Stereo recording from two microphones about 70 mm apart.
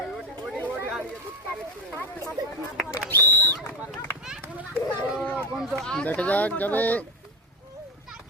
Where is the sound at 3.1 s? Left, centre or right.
Left.